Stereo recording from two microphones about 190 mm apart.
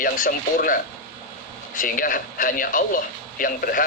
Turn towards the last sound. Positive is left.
turn(degrees=50)  # may be behind; listen again after turning